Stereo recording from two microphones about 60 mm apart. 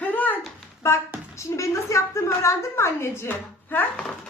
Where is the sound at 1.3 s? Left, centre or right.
Left.